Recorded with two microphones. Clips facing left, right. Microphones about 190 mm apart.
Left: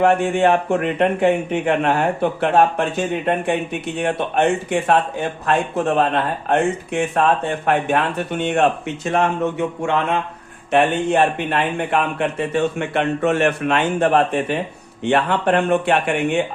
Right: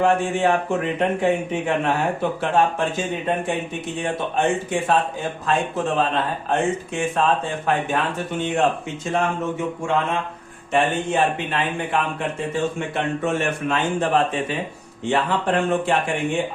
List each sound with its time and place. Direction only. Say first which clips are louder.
0.0 s speech: left 3 dB; 60° left (ahead or behind)
10.7 s speech: left 4 dB; 60° left (ahead or behind)